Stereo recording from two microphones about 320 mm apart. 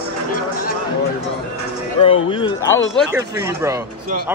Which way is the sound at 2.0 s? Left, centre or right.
Centre.